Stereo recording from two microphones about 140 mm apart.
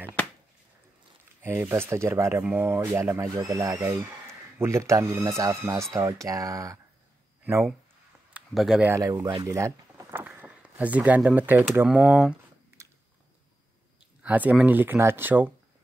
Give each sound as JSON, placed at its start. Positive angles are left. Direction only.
{"t": 1.4, "sound": "speech", "side_deg": -15}
{"t": 8.3, "sound": "a sound", "side_deg": -5}
{"t": 8.8, "sound": "speech", "side_deg": -20}
{"t": 9.5, "sound": "a sound", "side_deg": -20}
{"t": 11.7, "sound": "speech", "side_deg": -10}
{"t": 14.2, "sound": "speech", "side_deg": -10}